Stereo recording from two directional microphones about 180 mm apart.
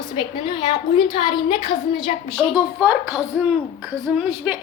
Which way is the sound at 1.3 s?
25° left (ahead or behind).